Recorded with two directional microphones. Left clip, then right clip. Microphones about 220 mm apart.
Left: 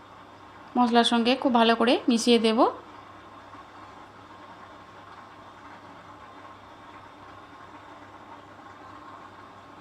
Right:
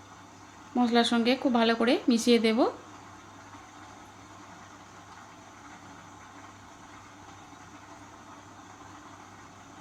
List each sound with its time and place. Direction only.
0.7 s speech: 5° left (ahead or behind)